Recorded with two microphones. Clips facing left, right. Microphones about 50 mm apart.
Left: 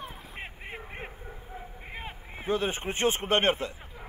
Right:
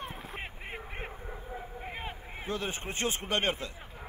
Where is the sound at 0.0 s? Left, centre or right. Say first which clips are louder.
Right 2 dB; right.